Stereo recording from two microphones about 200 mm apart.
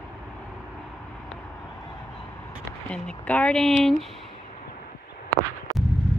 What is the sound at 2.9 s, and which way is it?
Speech, 5° left (ahead or behind).